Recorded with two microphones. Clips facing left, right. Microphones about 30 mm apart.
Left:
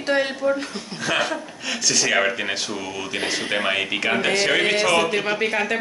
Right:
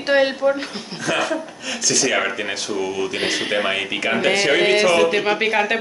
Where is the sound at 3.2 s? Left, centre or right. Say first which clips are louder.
Right 2 dB; centre.